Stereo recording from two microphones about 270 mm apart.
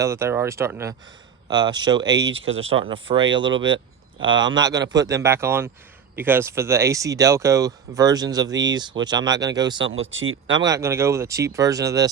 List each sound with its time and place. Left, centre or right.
0.0 s speech: centre
2.3 s speech: right
2.8 s speech: centre
9.8 s speech: right
10.6 s speech: centre